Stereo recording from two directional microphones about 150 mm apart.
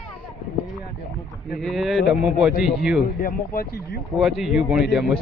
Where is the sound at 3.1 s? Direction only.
70° left (ahead or behind).